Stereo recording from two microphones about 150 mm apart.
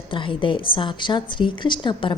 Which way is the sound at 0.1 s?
35° left (ahead or behind).